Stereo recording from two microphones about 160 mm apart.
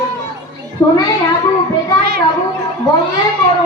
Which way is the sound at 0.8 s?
15° left (ahead or behind).